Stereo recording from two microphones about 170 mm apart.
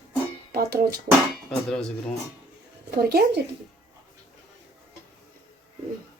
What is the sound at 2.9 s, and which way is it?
Speech, 70° right (ahead or behind).